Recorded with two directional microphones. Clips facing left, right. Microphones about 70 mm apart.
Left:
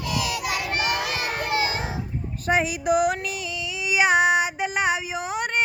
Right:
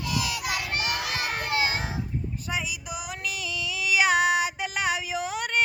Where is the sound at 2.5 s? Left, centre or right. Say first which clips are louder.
Left 13 dB; left.